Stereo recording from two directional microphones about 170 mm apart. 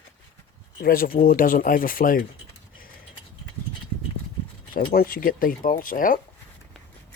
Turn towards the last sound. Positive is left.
turn(degrees=55)  # may be behind; listen again after turning